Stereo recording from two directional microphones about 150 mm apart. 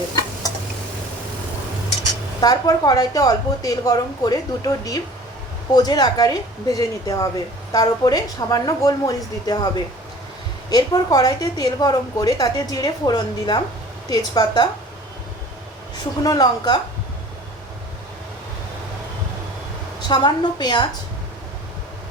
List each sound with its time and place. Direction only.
2.4 s a woman's voice: 25° left (ahead or behind)
10.7 s a woman's voice: 25° left (ahead or behind)
16.2 s a woman's voice: 25° left (ahead or behind)
20.0 s a woman's voice: 30° left (ahead or behind)